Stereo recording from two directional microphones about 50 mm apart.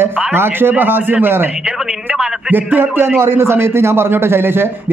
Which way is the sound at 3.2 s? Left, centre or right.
Right.